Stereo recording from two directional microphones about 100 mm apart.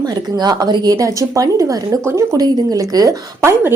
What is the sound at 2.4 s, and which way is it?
Speech, 40° right (ahead or behind).